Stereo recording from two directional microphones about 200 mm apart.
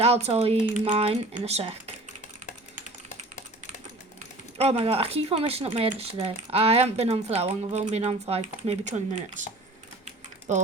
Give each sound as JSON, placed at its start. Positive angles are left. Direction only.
{"t": 0.0, "sound": "speech", "side_deg": -30}
{"t": 4.5, "sound": "speech", "side_deg": -30}